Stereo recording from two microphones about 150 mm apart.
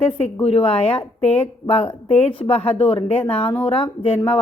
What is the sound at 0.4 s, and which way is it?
A woman's voice, 40° left (ahead or behind).